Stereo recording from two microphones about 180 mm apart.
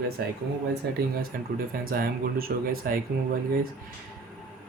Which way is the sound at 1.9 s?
55° right (ahead or behind).